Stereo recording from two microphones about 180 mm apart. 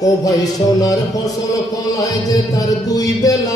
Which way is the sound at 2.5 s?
20° left (ahead or behind).